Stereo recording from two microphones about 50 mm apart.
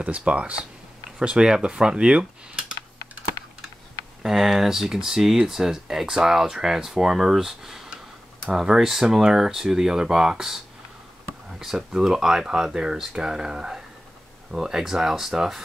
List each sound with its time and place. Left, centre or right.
0.0 s speech: right
4.2 s speech: centre
11.6 s speech: centre